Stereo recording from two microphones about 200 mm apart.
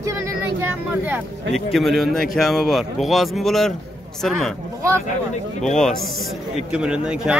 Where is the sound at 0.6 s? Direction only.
10° right (ahead or behind).